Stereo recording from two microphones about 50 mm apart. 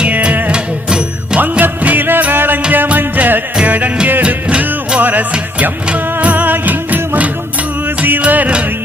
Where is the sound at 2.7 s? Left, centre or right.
Right.